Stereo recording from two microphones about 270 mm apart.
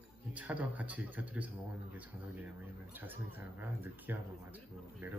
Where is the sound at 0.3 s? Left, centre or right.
Centre.